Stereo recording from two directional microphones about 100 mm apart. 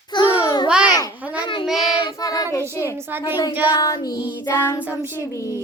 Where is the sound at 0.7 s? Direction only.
10° right (ahead or behind).